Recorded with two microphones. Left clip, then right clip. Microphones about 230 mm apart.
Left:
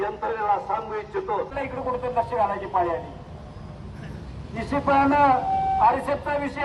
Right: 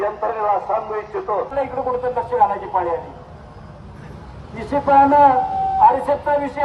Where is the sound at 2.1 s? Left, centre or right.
Right.